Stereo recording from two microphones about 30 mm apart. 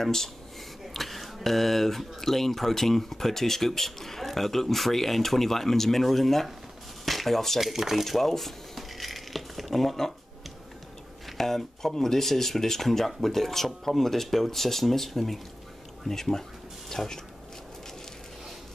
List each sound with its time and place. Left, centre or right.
0.0 s speech: centre
0.9 s speech: centre
7.6 s speech: centre
8.0 s dishes: centre
11.3 s speech: centre
16.9 s a sound: centre